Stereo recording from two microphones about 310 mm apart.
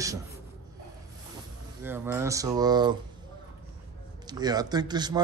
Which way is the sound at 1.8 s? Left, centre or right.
Centre.